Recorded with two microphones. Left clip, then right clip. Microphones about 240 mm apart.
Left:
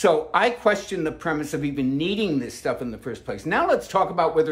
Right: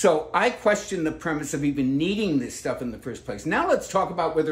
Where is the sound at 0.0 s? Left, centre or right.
Centre.